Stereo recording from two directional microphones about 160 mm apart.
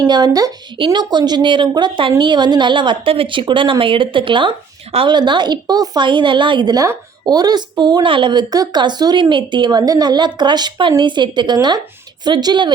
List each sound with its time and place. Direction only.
0.1 s a woman's voice: 25° right (ahead or behind)